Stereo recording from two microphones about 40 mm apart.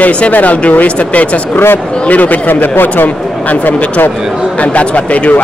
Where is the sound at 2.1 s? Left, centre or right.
Left.